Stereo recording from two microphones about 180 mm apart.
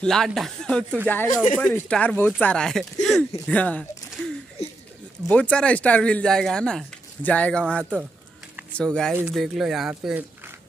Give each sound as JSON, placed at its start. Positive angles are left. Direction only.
{"t": 0.0, "sound": "speech", "side_deg": 0}
{"t": 4.6, "sound": "a sound", "side_deg": 35}
{"t": 5.3, "sound": "speech", "side_deg": 5}